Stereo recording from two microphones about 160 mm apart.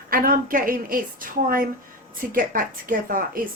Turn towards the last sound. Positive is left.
turn(degrees=-60)  # may be behind; listen again after turning